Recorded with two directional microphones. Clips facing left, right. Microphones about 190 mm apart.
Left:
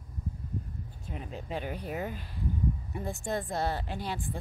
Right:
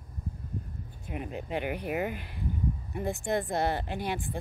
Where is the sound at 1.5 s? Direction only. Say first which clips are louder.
Right 3 dB; 60° right (ahead or behind).